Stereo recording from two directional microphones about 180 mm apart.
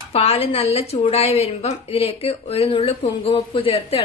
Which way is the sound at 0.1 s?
35° left (ahead or behind).